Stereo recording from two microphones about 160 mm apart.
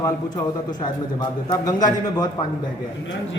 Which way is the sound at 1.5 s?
25° left (ahead or behind).